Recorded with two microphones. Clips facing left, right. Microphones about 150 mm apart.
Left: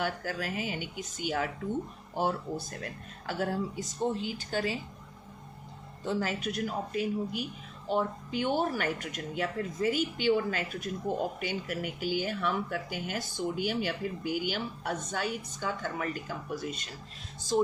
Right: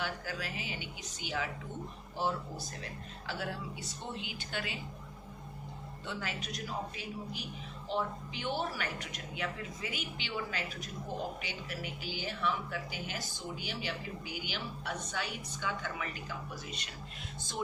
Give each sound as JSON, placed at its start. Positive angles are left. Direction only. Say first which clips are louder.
{"t": 0.0, "sound": "speech", "louder": "left 5 dB", "side_deg": 50}
{"t": 3.2, "sound": "speech", "louder": "left 8 dB", "side_deg": 45}
{"t": 6.1, "sound": "speech", "louder": "left 9 dB", "side_deg": 40}